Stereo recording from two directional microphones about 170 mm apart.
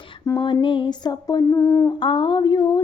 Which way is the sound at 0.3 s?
25° left (ahead or behind).